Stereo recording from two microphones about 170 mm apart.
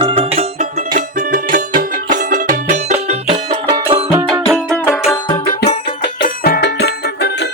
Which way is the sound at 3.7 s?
25° right (ahead or behind).